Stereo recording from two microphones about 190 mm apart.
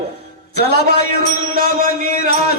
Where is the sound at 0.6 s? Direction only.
55° left (ahead or behind).